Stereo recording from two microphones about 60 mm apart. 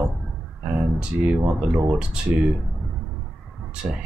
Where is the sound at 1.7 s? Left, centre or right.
Centre.